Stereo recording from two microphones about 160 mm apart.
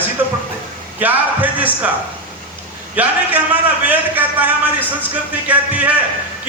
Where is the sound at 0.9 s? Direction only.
10° right (ahead or behind).